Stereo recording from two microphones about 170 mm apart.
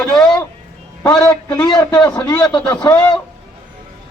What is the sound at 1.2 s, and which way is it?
A man's voice, 20° left (ahead or behind).